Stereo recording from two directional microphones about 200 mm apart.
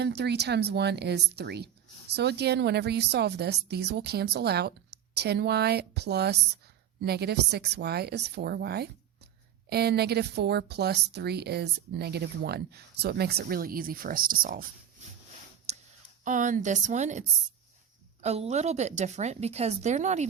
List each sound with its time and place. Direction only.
0.0 s speech: 55° right (ahead or behind)
15.7 s a sound: 35° right (ahead or behind)
16.2 s a woman's voice: 40° right (ahead or behind)